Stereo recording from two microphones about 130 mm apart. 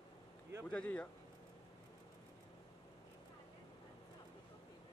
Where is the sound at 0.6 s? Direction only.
5° left (ahead or behind).